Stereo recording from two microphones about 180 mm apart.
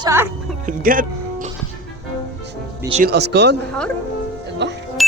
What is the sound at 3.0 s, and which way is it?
Speech, 65° right (ahead or behind).